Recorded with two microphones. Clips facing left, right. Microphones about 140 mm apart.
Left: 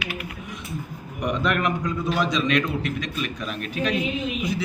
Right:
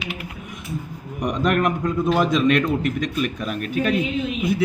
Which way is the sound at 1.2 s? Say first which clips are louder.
Right 3 dB; 45° right (ahead or behind).